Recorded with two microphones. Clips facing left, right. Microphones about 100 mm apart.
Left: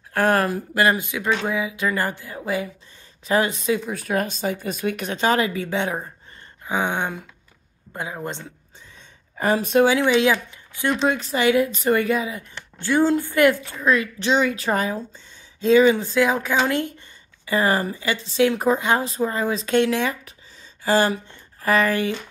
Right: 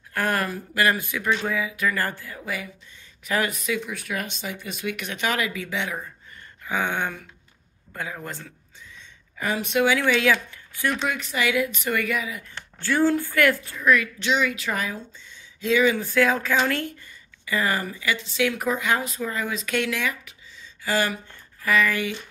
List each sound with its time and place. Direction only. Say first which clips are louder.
0.1 s speech: left 6 dB; 35° left (ahead or behind)
6.6 s speech: left 2 dB; 20° left (ahead or behind)
8.9 s gasp: left 6 dB; 40° left (ahead or behind)
9.9 s speech: left 3 dB; 20° left (ahead or behind)
17.5 s speech: left 5 dB; 30° left (ahead or behind)